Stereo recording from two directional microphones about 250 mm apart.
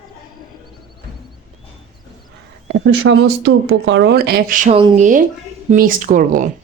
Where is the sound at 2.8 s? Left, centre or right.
Right.